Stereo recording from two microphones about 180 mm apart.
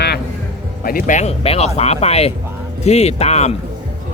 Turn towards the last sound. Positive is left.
turn(degrees=35)  # may be behind; listen again after turning